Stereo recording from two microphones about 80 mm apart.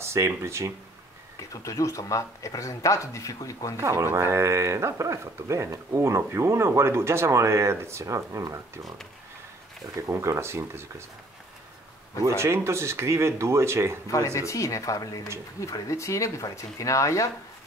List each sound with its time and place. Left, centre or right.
0.0 s speech: right
1.5 s speech: left
3.7 s speech: right
10.0 s speech: right
12.3 s speech: right
14.1 s speech: left